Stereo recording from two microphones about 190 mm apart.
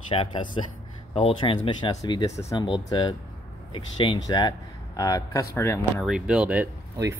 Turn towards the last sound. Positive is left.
turn(degrees=-10)  # may be behind; listen again after turning